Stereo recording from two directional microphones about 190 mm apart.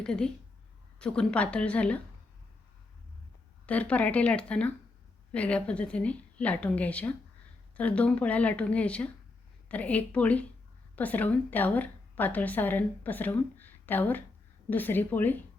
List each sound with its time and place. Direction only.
0.0 s a woman's voice: 5° left (ahead or behind)
3.7 s a woman's voice: 5° left (ahead or behind)